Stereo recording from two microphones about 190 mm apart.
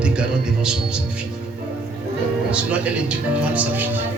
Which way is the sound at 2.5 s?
5° right (ahead or behind).